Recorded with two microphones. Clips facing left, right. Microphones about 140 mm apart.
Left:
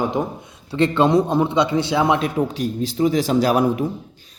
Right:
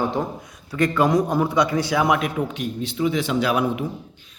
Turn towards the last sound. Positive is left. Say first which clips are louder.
# left 4 dB
turn(degrees=40)  # may be behind; listen again after turning